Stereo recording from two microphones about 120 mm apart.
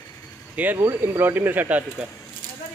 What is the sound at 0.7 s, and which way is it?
Speech, 25° right (ahead or behind).